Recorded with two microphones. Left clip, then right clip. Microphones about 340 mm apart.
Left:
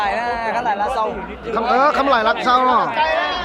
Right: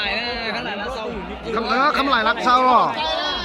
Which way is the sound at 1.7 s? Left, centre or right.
Centre.